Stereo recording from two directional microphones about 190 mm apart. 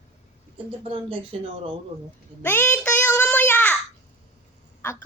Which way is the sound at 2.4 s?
10° left (ahead or behind).